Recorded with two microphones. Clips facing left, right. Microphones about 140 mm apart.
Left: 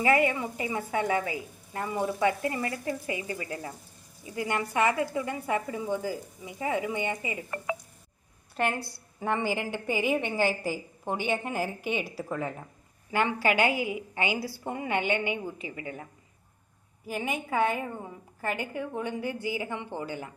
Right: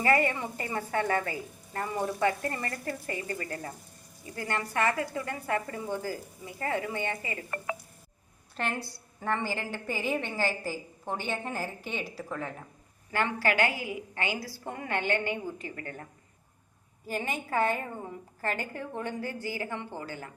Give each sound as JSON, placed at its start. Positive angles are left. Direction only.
{"t": 0.0, "sound": "a woman's voice", "side_deg": 5}
{"t": 17.1, "sound": "a woman's voice", "side_deg": 10}